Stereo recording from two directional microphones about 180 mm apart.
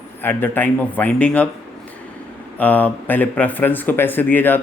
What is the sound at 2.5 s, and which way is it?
A man's voice, 10° left (ahead or behind).